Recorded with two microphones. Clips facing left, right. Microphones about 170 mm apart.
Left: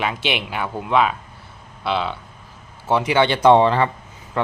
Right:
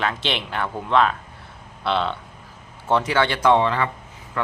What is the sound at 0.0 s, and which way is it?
Speech, 10° left (ahead or behind).